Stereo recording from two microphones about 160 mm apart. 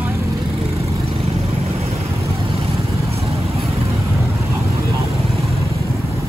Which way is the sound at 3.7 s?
40° right (ahead or behind).